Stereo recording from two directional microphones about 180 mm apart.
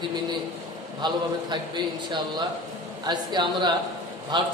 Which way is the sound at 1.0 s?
25° right (ahead or behind).